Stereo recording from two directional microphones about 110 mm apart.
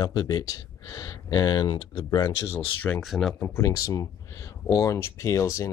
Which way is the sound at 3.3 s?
25° left (ahead or behind).